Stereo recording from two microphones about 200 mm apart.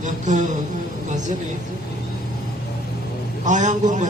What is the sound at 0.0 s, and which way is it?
Speech, 35° right (ahead or behind).